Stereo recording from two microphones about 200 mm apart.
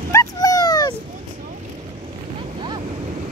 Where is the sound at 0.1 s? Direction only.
15° left (ahead or behind).